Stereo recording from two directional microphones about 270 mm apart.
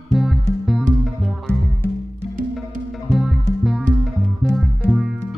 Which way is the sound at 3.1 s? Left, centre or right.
Centre.